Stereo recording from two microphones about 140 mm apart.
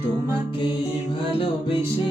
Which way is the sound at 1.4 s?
40° left (ahead or behind).